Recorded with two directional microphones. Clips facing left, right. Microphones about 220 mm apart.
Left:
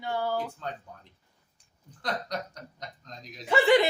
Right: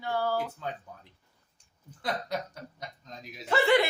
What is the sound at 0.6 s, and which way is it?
Speech, 5° right (ahead or behind).